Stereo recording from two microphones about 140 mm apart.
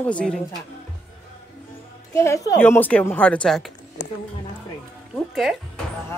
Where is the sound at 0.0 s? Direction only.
10° left (ahead or behind).